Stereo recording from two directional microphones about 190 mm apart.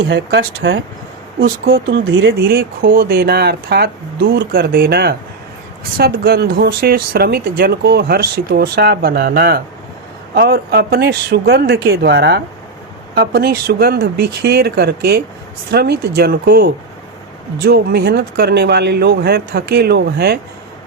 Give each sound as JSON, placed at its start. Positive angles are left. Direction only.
{"t": 0.0, "sound": "speech", "side_deg": -70}
{"t": 1.4, "sound": "speech", "side_deg": -50}
{"t": 1.7, "sound": "speech", "side_deg": -85}
{"t": 2.5, "sound": "speech", "side_deg": -50}